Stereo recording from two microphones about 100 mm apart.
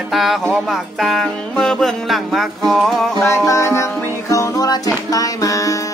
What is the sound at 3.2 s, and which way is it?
Music, 30° left (ahead or behind).